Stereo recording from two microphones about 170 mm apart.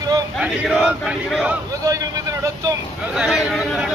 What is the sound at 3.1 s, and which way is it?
Speech, centre (ahead or behind).